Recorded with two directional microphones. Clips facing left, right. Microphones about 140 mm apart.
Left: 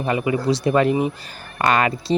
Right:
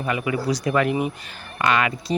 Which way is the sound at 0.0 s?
30° left (ahead or behind).